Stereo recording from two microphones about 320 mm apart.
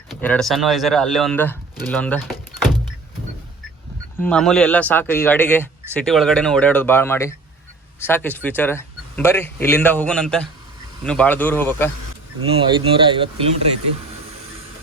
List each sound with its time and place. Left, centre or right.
0.1 s speech: centre
4.2 s speech: centre
12.5 s speech: centre